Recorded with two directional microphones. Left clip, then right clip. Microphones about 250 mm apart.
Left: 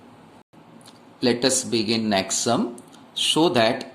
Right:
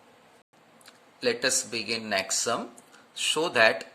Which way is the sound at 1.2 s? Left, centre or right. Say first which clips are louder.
Left 5 dB; centre.